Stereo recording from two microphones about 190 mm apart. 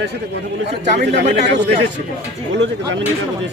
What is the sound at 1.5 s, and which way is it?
Speech, 70° right (ahead or behind).